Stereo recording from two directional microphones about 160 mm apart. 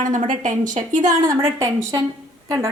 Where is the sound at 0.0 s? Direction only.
55° right (ahead or behind).